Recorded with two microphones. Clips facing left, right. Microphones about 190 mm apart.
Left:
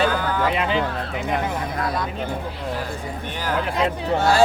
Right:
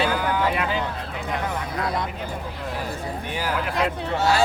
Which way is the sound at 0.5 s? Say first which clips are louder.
Left 3 dB; 20° left (ahead or behind).